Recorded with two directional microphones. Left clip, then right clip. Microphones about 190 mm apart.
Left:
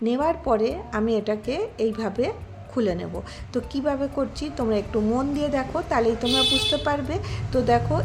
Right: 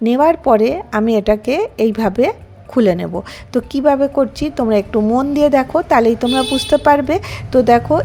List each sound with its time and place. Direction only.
0.0 s a woman's voice: 45° right (ahead or behind)